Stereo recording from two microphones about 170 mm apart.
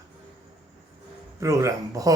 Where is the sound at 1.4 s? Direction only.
20° right (ahead or behind).